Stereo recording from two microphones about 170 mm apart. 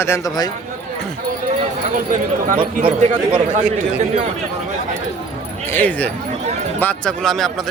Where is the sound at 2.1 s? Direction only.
50° right (ahead or behind).